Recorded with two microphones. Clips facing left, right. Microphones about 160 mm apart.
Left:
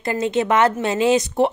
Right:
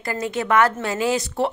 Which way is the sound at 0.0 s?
25° left (ahead or behind).